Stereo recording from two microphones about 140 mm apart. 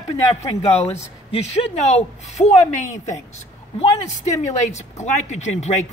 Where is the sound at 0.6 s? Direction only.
50° left (ahead or behind).